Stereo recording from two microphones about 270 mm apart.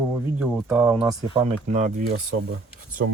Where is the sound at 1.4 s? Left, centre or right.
Right.